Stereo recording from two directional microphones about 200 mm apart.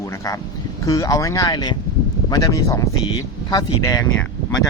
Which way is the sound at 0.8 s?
15° left (ahead or behind).